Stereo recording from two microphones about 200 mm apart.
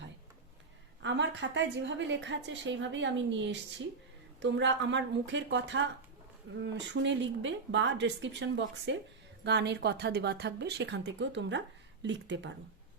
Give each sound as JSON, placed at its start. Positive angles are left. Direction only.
{"t": 1.0, "sound": "a woman's voice", "side_deg": -65}